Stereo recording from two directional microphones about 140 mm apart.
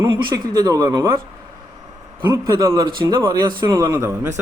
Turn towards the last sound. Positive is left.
turn(degrees=-20)  # may be behind; listen again after turning